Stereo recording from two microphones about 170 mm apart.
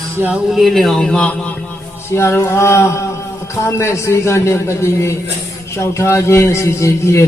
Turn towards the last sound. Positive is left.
turn(degrees=15)  # may be behind; listen again after turning